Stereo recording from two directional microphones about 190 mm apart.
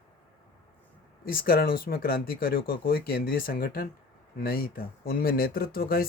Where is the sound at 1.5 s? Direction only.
50° left (ahead or behind).